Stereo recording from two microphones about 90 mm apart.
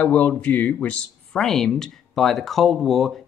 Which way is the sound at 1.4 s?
5° left (ahead or behind).